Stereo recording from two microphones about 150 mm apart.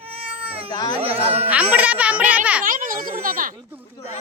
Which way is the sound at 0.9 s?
40° right (ahead or behind).